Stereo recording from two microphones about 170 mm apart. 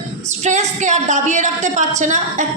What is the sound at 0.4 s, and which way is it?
A woman's voice, 45° right (ahead or behind).